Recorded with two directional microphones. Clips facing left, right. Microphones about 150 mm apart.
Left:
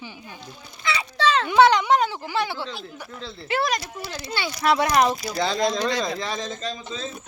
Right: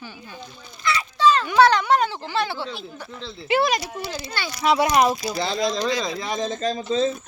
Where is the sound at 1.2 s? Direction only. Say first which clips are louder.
Right 3 dB; 75° left (ahead or behind).